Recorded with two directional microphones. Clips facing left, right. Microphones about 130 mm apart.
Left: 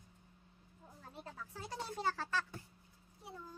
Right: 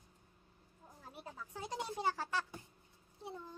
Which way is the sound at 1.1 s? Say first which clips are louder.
Even; 15° right (ahead or behind).